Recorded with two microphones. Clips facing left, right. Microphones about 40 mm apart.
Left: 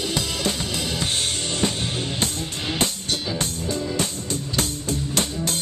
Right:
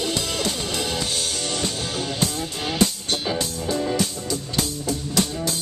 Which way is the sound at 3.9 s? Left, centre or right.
Left.